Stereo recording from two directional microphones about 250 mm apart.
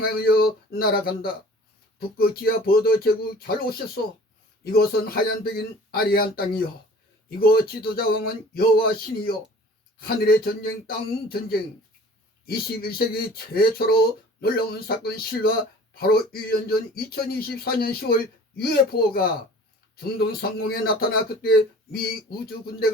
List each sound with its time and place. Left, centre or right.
0.0 s speech: left
4.6 s speech: left